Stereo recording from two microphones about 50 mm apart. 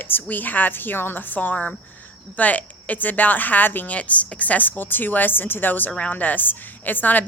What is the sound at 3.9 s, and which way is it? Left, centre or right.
Speech, left.